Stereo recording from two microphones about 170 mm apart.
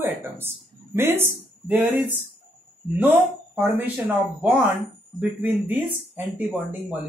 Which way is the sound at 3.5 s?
10° right (ahead or behind).